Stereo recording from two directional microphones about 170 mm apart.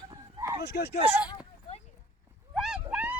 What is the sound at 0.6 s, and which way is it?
Speech, 75° left (ahead or behind).